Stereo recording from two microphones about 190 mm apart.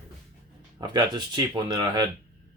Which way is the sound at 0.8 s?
25° right (ahead or behind).